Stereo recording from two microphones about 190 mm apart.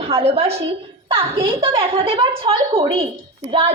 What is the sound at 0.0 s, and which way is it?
A woman's voice, 30° right (ahead or behind).